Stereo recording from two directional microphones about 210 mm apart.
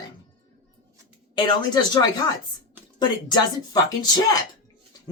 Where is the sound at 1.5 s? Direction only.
20° left (ahead or behind).